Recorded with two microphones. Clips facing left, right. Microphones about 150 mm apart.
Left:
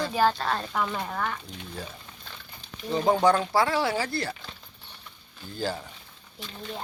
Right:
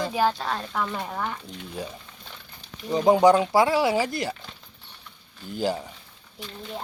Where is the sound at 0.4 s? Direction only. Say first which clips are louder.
Even; centre (ahead or behind); by 4.4 s 15° right (ahead or behind).